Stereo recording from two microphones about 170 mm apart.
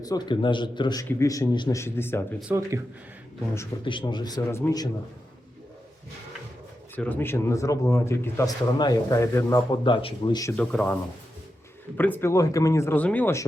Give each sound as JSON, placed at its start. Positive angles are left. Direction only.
{"t": 0.0, "sound": "a man's voice", "side_deg": 25}
{"t": 2.5, "sound": "speech", "side_deg": -15}
{"t": 3.8, "sound": "a man's voice", "side_deg": 30}
{"t": 4.4, "sound": "speech", "side_deg": 15}
{"t": 6.9, "sound": "speech", "side_deg": 10}
{"t": 9.8, "sound": "a man's voice", "side_deg": 30}
{"t": 10.6, "sound": "speech", "side_deg": 5}
{"t": 11.9, "sound": "speech", "side_deg": 10}